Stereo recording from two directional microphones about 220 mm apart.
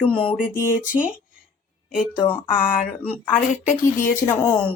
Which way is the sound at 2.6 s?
35° left (ahead or behind).